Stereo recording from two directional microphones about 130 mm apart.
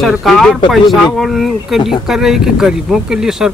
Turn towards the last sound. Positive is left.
turn(degrees=-5)  # may be behind; listen again after turning